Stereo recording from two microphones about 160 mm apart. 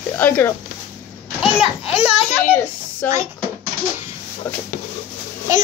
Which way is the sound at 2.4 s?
10° left (ahead or behind).